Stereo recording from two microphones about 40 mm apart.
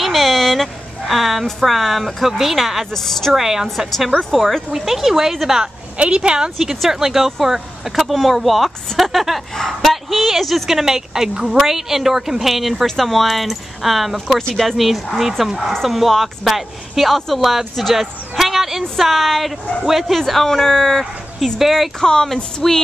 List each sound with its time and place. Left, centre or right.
0.0 s a sound: centre
2.3 s speech: centre
2.9 s a woman's voice: centre
3.3 s speech: centre
4.3 s speech: centre
5.9 s a woman's voice: right; by 21.0 s centre
21.5 s speech: centre
22.0 s a woman's voice: centre